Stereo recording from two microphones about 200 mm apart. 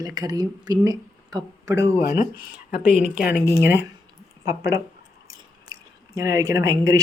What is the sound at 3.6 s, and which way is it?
Speech, 10° right (ahead or behind).